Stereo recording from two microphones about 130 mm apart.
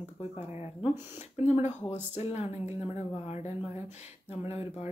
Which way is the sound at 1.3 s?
60° left (ahead or behind).